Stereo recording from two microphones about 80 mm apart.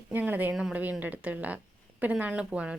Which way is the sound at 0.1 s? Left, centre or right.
Right.